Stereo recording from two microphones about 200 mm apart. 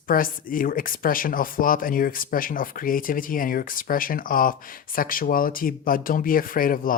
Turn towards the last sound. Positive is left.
turn(degrees=45)  # may be behind; listen again after turning